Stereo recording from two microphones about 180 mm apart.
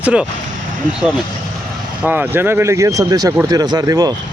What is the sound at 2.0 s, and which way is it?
Speech, 10° right (ahead or behind).